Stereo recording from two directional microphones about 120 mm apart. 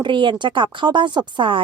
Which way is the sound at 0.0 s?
40° right (ahead or behind).